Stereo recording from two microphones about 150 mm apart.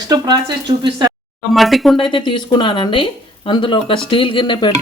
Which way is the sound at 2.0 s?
35° left (ahead or behind).